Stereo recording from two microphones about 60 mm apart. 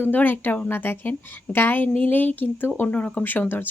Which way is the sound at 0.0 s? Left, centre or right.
Left.